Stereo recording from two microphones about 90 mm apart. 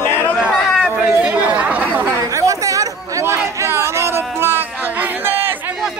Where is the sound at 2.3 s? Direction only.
35° right (ahead or behind).